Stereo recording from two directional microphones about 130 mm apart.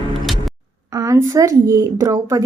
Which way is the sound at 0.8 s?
25° right (ahead or behind).